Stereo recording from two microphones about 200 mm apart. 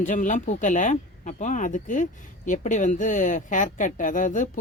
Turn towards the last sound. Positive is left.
turn(degrees=40)  # may be behind; listen again after turning